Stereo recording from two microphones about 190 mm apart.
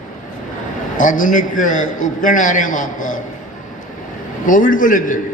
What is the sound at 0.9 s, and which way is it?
A man's voice, 45° left (ahead or behind).